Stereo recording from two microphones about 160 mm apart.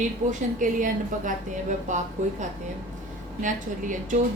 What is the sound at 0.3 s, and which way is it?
A woman's voice, 55° right (ahead or behind).